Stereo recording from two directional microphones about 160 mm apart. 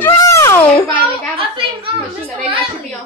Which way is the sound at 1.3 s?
35° right (ahead or behind).